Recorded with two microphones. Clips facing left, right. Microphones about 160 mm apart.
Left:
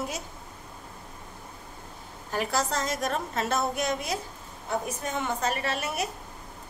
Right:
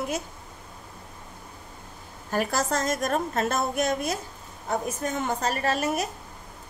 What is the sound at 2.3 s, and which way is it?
A woman's voice, 50° right (ahead or behind).